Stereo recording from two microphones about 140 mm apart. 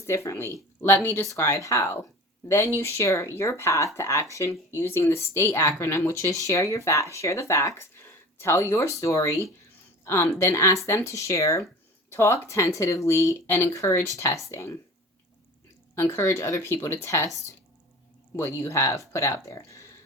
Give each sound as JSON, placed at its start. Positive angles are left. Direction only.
{"t": 0.0, "sound": "speech", "side_deg": 20}
{"t": 16.0, "sound": "speech", "side_deg": 20}
{"t": 18.3, "sound": "speech", "side_deg": 20}